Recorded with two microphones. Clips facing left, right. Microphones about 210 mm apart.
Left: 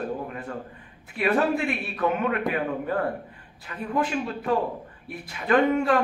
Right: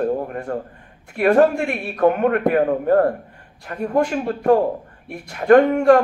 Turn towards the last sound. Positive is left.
turn(degrees=-50)  # may be behind; listen again after turning